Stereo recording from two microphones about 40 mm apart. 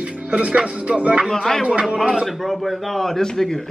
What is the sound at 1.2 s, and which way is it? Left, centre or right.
A man's voice, centre.